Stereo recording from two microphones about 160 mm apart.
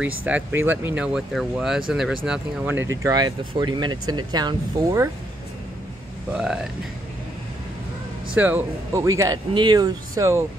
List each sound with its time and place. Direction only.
0.0 s speech: 10° right (ahead or behind)
6.3 s speech: 5° right (ahead or behind)
8.4 s speech: 10° right (ahead or behind)